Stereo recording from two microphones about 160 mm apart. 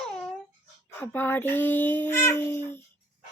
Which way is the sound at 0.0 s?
5° left (ahead or behind).